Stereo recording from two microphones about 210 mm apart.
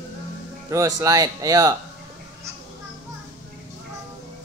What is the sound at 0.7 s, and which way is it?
Speech, 15° right (ahead or behind).